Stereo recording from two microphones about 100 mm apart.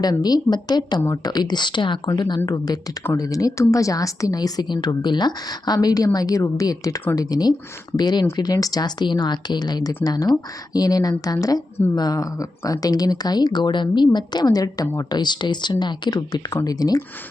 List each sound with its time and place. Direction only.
0.0 s a woman's voice: 40° left (ahead or behind)